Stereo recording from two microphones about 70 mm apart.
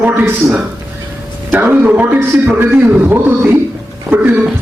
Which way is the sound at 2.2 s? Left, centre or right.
Right.